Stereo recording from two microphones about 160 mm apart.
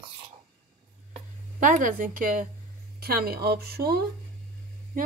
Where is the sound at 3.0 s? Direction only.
75° right (ahead or behind).